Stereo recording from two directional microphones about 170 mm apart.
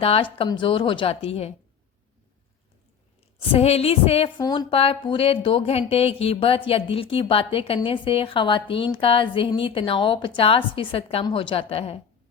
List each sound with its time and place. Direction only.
0.0 s a woman's voice: 35° left (ahead or behind)
3.4 s a woman's voice: 35° left (ahead or behind)